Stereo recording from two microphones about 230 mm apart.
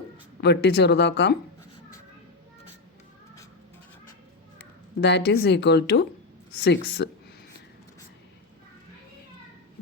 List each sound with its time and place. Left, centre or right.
0.4 s speech: left
4.5 s speech: left